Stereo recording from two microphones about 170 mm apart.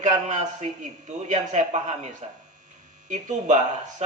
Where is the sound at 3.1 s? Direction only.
45° right (ahead or behind).